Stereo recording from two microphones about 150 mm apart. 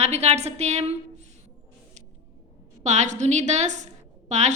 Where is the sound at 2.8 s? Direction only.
50° right (ahead or behind).